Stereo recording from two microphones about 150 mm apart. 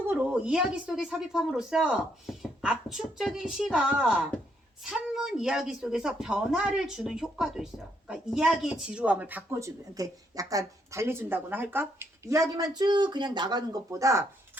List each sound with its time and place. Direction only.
0.1 s a woman's voice: 10° right (ahead or behind)